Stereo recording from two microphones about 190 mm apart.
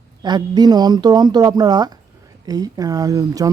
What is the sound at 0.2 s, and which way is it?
Speech, 20° right (ahead or behind).